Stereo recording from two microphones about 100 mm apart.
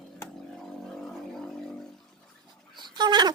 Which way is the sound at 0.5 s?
5° left (ahead or behind).